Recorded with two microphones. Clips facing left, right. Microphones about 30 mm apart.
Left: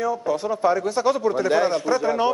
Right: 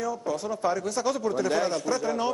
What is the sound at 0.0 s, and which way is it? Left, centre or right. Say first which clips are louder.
Speech: left 6 dB; left.